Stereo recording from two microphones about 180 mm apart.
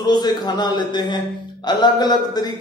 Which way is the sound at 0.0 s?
25° left (ahead or behind).